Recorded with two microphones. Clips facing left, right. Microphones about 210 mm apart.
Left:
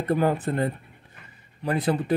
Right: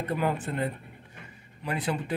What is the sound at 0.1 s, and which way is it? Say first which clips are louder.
Speech: left 7 dB; 40° left (ahead or behind).